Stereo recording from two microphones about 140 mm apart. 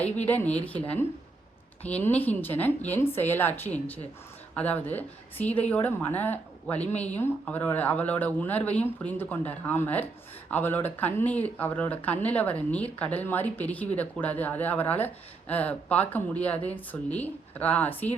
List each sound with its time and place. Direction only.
0.3 s speech: 10° left (ahead or behind)